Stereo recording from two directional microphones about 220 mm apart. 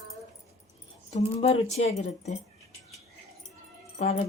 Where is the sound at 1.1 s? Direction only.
25° left (ahead or behind).